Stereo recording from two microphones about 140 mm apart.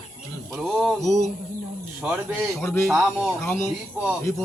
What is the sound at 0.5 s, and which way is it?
Speech, centre (ahead or behind).